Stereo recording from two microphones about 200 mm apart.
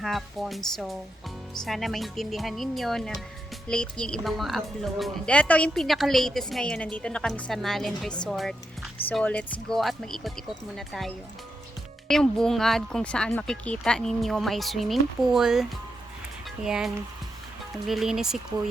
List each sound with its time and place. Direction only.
0.0 s a woman's voice: centre (ahead or behind)